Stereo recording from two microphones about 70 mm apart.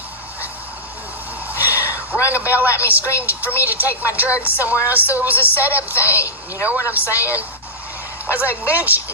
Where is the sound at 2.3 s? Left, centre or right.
Right.